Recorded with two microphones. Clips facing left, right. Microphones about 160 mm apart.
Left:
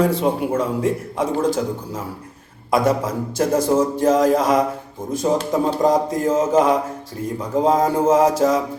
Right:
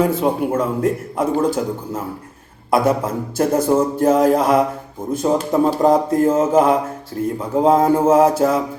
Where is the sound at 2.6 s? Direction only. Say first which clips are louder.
Right 2 dB; 5° right (ahead or behind).